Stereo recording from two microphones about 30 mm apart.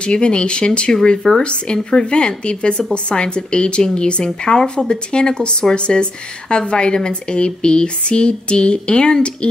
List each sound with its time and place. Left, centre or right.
0.0 s speech: left